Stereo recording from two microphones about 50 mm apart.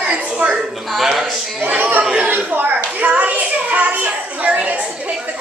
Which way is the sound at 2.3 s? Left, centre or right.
Right.